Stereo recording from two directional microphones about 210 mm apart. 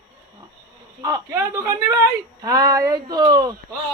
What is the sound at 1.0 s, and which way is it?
Speech, 15° right (ahead or behind).